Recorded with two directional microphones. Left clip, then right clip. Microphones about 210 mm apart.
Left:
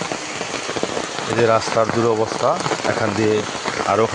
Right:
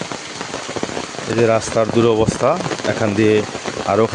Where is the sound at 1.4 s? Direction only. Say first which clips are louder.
Right 1 dB; 35° right (ahead or behind).